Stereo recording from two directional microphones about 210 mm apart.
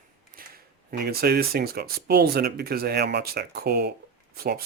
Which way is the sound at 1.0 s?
50° right (ahead or behind).